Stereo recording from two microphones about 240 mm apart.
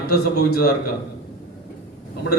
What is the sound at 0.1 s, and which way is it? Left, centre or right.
Speech, left.